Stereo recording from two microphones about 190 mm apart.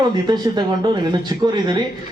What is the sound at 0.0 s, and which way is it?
A man's voice, 20° right (ahead or behind).